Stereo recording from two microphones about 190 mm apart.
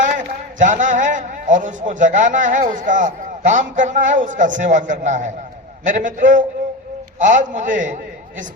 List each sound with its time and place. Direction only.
0.6 s a man's voice: 40° right (ahead or behind)